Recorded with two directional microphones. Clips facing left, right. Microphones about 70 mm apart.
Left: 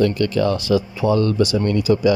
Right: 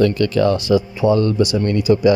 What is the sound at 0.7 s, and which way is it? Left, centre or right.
Speech, right.